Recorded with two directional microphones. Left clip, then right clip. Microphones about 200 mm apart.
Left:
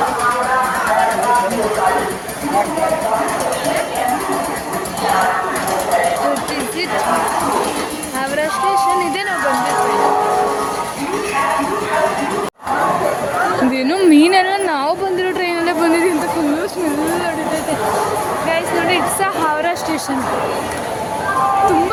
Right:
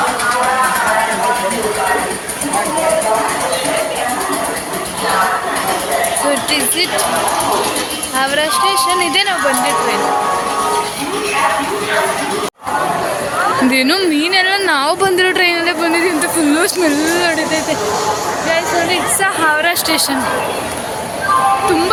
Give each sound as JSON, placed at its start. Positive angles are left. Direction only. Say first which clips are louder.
{"t": 8.4, "sound": "a sound", "louder": "even", "side_deg": 0}
{"t": 13.7, "sound": "speech", "louder": "right 4 dB", "side_deg": 0}
{"t": 14.1, "sound": "a woman's voice", "louder": "left 5 dB", "side_deg": 30}
{"t": 14.3, "sound": "a woman's voice", "louder": "right 2 dB", "side_deg": 10}
{"t": 15.6, "sound": "a woman's voice", "louder": "even", "side_deg": 15}
{"t": 18.5, "sound": "speech", "louder": "right 2 dB", "side_deg": 0}